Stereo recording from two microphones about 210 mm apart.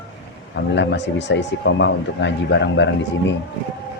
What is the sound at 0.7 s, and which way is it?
Speech, 55° left (ahead or behind).